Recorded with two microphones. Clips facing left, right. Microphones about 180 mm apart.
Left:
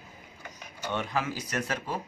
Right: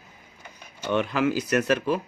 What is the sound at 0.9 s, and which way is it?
Speech, 70° right (ahead or behind).